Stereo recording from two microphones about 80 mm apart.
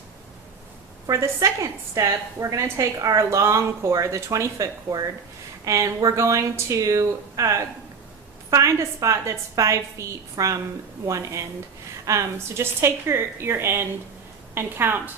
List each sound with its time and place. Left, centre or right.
1.0 s a woman's voice: right
10.4 s a woman's voice: right